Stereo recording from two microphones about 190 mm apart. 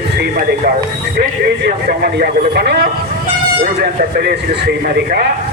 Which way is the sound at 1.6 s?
55° right (ahead or behind).